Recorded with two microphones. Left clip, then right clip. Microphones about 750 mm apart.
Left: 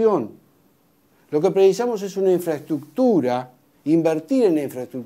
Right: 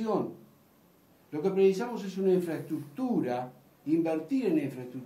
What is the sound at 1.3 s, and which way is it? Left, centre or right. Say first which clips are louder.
Speech: left 10 dB; left.